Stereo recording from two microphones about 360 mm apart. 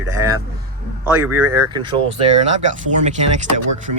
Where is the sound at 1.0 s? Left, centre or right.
Centre.